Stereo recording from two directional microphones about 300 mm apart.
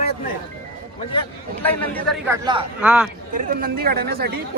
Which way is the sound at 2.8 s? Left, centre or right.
Centre.